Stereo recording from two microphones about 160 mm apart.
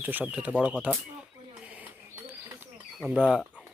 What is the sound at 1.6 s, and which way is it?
Bird, 10° right (ahead or behind).